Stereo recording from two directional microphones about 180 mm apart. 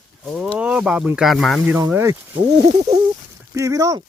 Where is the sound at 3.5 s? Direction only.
20° right (ahead or behind).